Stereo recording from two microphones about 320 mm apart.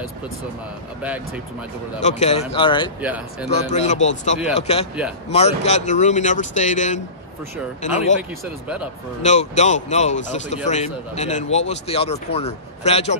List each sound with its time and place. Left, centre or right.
1.0 s speech: centre
2.0 s speech: left
3.0 s speech: centre
3.4 s speech: left
8.2 s speech: centre
9.2 s speech: left